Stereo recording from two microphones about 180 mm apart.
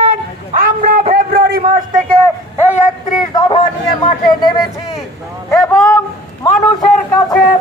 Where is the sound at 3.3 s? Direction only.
20° left (ahead or behind).